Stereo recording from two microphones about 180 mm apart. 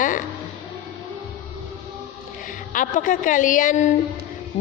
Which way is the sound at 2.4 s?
45° left (ahead or behind).